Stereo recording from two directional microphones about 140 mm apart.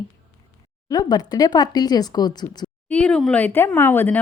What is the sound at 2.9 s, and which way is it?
A woman's voice, 10° left (ahead or behind).